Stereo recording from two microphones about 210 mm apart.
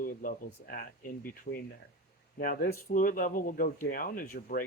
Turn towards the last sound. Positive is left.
turn(degrees=45)  # may be behind; listen again after turning